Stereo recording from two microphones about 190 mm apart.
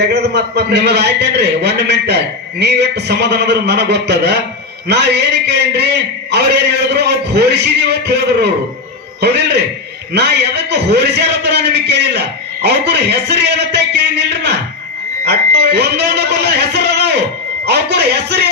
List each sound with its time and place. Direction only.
0.1 s a man's voice: 60° right (ahead or behind)